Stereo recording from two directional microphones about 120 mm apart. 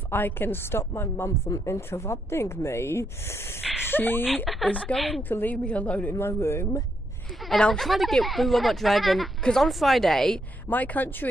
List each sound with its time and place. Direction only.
0.1 s a woman's voice: 15° left (ahead or behind)
5.3 s a woman's voice: 15° left (ahead or behind)
7.4 s speech: 5° left (ahead or behind)
10.7 s a woman's voice: 15° left (ahead or behind)